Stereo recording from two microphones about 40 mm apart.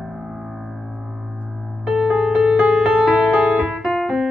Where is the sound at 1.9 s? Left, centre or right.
Right.